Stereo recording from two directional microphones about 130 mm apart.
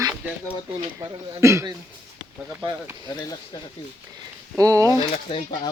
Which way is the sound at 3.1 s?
30° left (ahead or behind).